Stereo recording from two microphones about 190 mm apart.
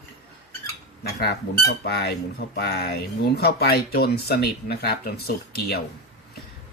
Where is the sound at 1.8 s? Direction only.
55° left (ahead or behind).